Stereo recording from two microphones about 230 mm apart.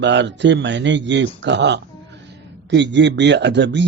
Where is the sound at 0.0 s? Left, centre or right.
Right.